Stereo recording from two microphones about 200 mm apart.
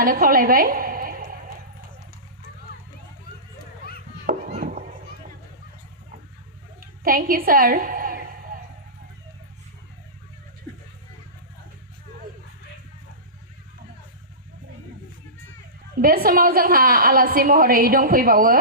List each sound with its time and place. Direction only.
0.0 s a woman's voice: 45° right (ahead or behind)
4.3 s chop: 40° right (ahead or behind)
6.7 s a sound: 45° right (ahead or behind)
16.0 s a woman's voice: 45° right (ahead or behind)